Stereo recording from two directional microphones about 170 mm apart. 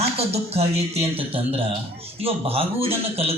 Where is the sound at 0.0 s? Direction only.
35° right (ahead or behind).